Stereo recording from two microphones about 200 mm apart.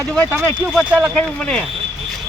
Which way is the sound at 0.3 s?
5° right (ahead or behind).